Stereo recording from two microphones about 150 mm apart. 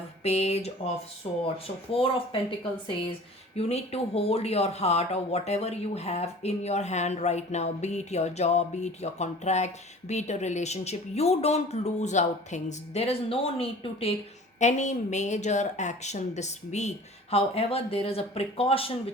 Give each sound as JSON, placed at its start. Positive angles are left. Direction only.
{"t": 0.2, "sound": "speech", "side_deg": 45}
{"t": 1.9, "sound": "speech", "side_deg": 35}
{"t": 3.5, "sound": "speech", "side_deg": 45}
{"t": 14.6, "sound": "speech", "side_deg": 50}